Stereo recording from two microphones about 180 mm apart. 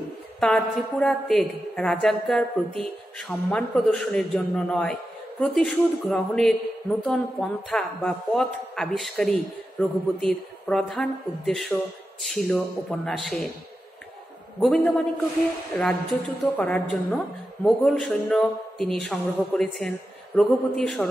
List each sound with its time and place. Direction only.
0.4 s speech: 5° left (ahead or behind)
14.6 s a man's voice: 5° left (ahead or behind)